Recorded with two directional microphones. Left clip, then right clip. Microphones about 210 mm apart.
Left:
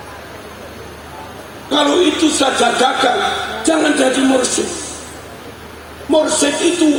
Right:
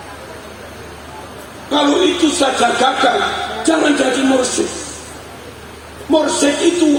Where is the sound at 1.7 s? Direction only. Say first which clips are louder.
Even; 55° left (ahead or behind).